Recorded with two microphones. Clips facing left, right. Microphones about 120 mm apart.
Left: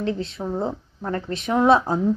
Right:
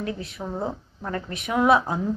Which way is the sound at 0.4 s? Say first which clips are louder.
Left 4 dB; centre (ahead or behind).